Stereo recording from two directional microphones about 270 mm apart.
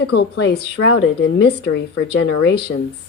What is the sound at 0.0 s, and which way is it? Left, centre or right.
Speech, left.